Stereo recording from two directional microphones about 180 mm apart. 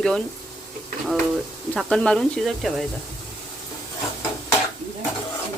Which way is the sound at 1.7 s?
5° left (ahead or behind).